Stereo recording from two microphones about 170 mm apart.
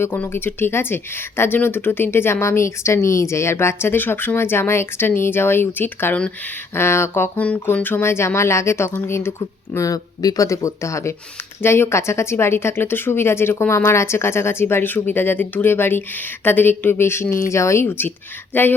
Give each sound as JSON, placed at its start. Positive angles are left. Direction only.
{"t": 0.0, "sound": "speech", "side_deg": 10}